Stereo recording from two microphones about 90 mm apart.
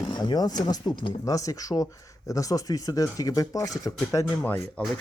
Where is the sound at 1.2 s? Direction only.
40° left (ahead or behind).